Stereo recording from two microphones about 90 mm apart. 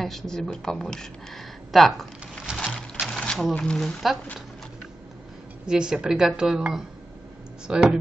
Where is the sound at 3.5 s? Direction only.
10° left (ahead or behind).